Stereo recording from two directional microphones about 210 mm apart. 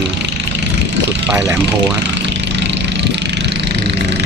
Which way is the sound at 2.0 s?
55° right (ahead or behind).